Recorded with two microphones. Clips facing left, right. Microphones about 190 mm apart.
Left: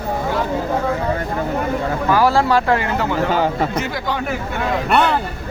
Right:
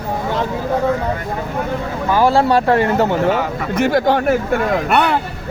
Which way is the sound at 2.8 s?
35° right (ahead or behind).